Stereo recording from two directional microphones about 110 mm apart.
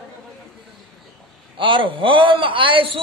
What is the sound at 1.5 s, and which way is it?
A man's voice, 50° right (ahead or behind).